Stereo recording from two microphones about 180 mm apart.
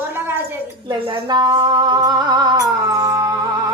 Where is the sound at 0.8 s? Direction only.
25° right (ahead or behind).